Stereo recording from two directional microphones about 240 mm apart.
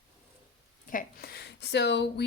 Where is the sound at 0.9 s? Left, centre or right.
Left.